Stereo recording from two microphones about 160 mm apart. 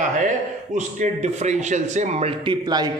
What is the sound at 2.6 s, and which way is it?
Speech, 25° right (ahead or behind).